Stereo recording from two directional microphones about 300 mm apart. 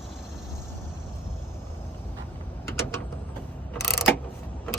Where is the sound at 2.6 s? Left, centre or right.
Centre.